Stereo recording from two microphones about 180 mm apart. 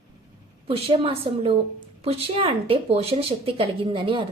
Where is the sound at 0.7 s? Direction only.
30° right (ahead or behind).